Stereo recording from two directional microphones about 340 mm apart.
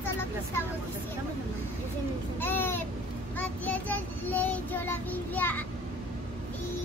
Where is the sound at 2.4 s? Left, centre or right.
Centre.